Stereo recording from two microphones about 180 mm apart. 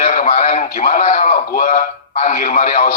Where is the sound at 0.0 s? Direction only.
40° left (ahead or behind).